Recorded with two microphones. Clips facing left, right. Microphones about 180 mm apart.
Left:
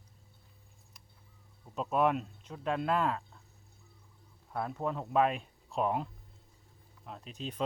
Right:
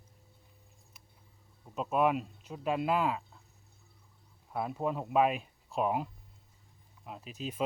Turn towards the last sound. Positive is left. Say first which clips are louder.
# right 1 dB
turn(degrees=-5)  # may be behind; listen again after turning